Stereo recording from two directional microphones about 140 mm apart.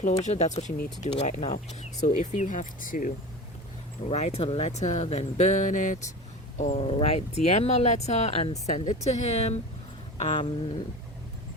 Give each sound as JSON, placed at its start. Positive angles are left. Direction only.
{"t": 0.0, "sound": "speech", "side_deg": 55}
{"t": 4.1, "sound": "speech", "side_deg": 50}
{"t": 6.6, "sound": "speech", "side_deg": 55}
{"t": 10.2, "sound": "speech", "side_deg": 40}